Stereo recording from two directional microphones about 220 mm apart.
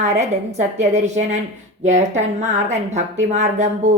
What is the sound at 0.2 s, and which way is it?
A woman's voice, 30° right (ahead or behind).